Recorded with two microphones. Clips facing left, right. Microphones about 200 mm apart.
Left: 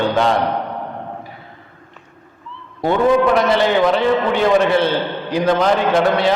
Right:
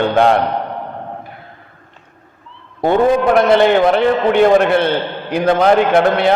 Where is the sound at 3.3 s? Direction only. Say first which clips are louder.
Right 4 dB; 55° right (ahead or behind).